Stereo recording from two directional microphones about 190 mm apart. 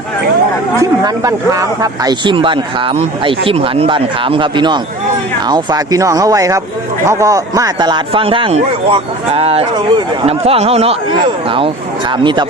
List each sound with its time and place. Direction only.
0.8 s speech: 15° right (ahead or behind)